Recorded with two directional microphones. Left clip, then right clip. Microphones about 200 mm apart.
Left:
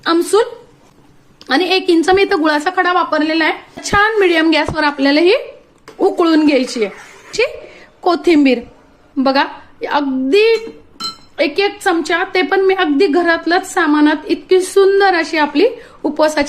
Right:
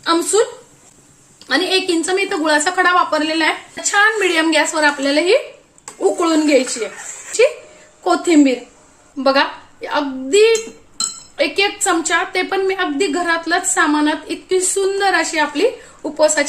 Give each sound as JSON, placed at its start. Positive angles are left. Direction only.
{"t": 0.0, "sound": "a sound", "side_deg": 40}
{"t": 1.5, "sound": "a woman's voice", "side_deg": 35}
{"t": 8.0, "sound": "a woman's voice", "side_deg": 35}